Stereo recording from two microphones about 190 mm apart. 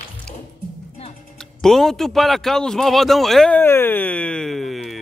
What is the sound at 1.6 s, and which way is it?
A man's voice, centre (ahead or behind).